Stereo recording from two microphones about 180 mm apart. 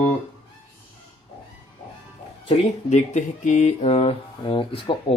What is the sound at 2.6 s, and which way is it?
Speech, 40° left (ahead or behind).